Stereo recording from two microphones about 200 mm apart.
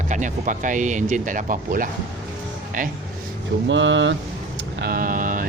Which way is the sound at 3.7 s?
70° right (ahead or behind).